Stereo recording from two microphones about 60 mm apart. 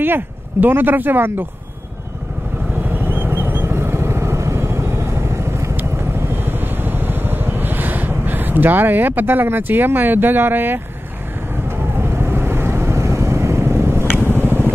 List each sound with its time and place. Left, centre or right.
0.0 s speech: right
2.8 s vehicle: right
5.8 s vehicle: right
12.0 s vehicle: right
14.3 s a sound: right